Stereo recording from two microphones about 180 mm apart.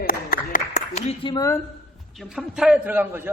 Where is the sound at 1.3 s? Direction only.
15° left (ahead or behind).